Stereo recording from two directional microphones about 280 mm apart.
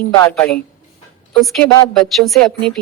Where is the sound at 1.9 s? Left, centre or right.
Centre.